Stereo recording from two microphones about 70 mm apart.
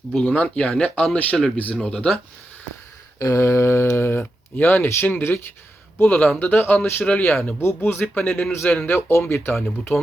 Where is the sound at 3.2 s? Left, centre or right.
Left.